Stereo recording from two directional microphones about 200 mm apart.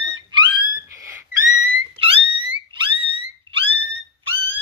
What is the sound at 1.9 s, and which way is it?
Dog, 25° right (ahead or behind).